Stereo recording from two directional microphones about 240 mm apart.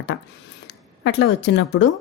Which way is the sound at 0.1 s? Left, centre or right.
Left.